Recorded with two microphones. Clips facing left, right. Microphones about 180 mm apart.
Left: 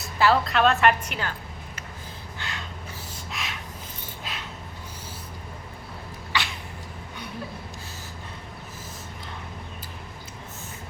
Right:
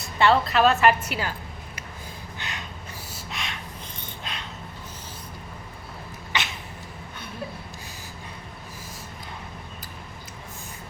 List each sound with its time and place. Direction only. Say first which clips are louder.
0.2 s a woman's voice: right 1 dB; centre (ahead or behind)
2.4 s gasp: left 1 dB; 20° right (ahead or behind)
3.1 s gasp: right 1 dB; centre (ahead or behind)
4.2 s dog: even; 5° left (ahead or behind)
6.3 s a sound: even; 20° right (ahead or behind)